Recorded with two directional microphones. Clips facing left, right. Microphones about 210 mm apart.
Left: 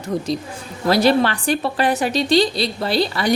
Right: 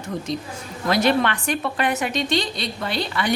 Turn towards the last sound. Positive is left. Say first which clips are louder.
# left 5 dB
turn(degrees=35)  # may be behind; listen again after turning